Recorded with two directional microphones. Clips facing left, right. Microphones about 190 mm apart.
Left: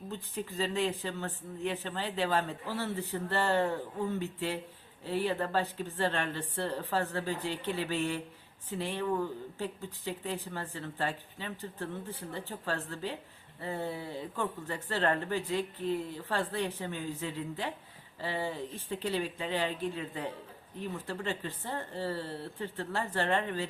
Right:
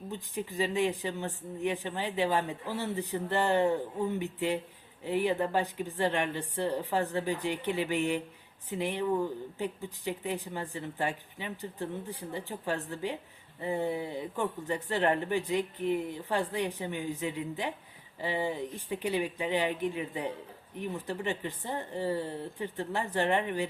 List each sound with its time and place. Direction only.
0.1 s speech: 15° right (ahead or behind)